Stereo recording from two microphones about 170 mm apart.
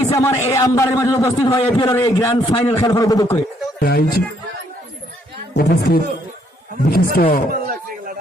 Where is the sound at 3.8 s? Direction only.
65° left (ahead or behind).